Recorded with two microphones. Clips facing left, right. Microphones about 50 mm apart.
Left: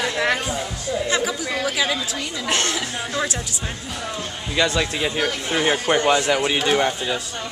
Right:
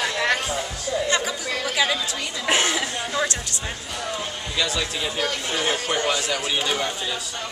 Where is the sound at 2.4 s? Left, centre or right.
Centre.